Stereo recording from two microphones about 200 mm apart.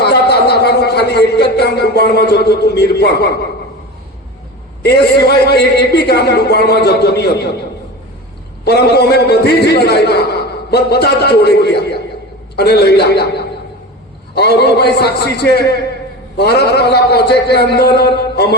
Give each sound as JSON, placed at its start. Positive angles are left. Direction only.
{"t": 0.0, "sound": "speech", "side_deg": 55}
{"t": 4.8, "sound": "a man's voice", "side_deg": 55}
{"t": 8.6, "sound": "a man's voice", "side_deg": 55}